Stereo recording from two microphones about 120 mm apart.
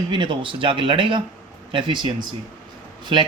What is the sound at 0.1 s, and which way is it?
Speech, 45° right (ahead or behind).